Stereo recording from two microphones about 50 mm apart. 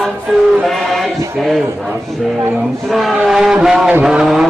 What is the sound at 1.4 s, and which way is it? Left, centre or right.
A man's voice, centre.